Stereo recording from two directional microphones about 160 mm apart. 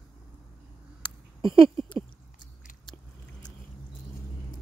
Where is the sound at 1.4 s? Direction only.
30° right (ahead or behind).